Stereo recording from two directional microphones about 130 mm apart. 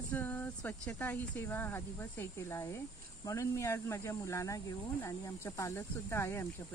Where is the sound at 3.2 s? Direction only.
20° left (ahead or behind).